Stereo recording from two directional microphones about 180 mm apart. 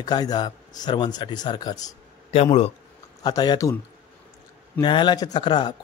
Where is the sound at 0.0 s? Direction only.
20° left (ahead or behind).